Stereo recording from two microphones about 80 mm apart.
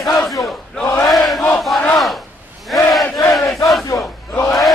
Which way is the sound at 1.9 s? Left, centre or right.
Centre.